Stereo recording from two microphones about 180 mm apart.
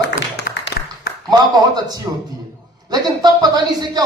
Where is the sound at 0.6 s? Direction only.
65° left (ahead or behind).